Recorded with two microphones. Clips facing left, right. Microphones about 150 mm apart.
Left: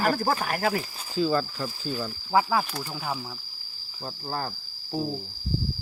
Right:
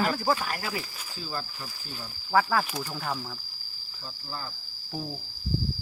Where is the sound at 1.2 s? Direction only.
90° left.